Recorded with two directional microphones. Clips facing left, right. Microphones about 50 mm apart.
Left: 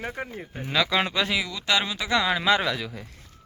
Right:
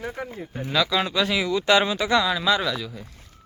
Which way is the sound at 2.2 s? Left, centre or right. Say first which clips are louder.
Even; left.